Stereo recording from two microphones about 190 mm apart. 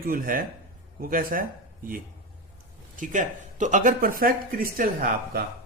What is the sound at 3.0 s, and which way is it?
A man's voice, 40° right (ahead or behind).